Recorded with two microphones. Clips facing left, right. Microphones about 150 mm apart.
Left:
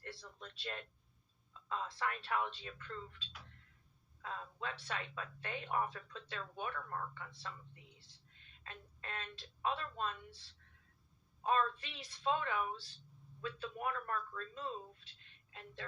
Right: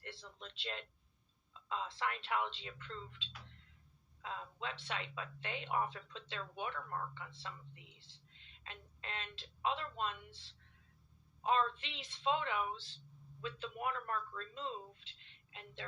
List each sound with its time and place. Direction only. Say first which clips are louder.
0.1 s speech: left 1 dB; 25° right (ahead or behind)
4.2 s speech: even; 20° right (ahead or behind)
9.0 s speech: even; 25° right (ahead or behind)
11.4 s speech: even; 25° right (ahead or behind)